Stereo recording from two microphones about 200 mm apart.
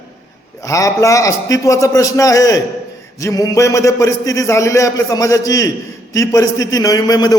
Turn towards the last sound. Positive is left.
turn(degrees=20)  # may be behind; listen again after turning